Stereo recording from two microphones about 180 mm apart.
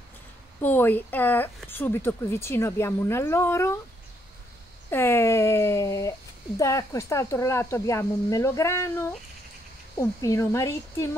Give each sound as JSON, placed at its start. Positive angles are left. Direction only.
{"t": 0.7, "sound": "speech", "side_deg": 10}
{"t": 4.8, "sound": "speech", "side_deg": 15}